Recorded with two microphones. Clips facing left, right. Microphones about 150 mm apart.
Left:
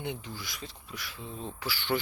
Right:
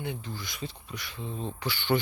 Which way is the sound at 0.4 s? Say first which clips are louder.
Right 5 dB; centre (ahead or behind).